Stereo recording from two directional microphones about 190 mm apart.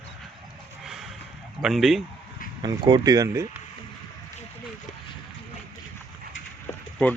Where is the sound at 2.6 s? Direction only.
20° right (ahead or behind).